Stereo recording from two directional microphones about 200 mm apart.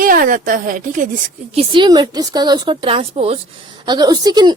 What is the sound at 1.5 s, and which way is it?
A woman's voice, 25° right (ahead or behind).